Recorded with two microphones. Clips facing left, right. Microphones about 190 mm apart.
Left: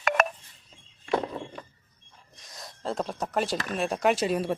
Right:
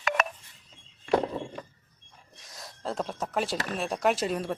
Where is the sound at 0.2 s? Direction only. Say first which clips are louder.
Left 6 dB; 50° left (ahead or behind).